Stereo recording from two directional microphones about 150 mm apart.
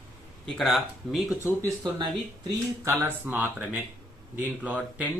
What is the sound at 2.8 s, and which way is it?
Speech, 15° right (ahead or behind).